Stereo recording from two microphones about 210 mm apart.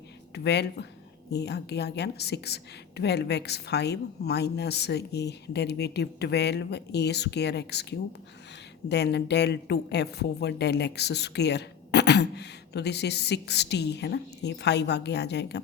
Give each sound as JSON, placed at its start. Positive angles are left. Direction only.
{"t": 0.3, "sound": "a woman's voice", "side_deg": 55}